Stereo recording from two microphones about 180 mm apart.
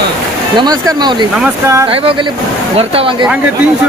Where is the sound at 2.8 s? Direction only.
30° right (ahead or behind).